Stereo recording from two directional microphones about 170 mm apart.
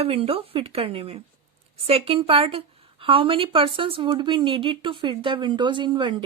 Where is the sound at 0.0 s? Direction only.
35° right (ahead or behind).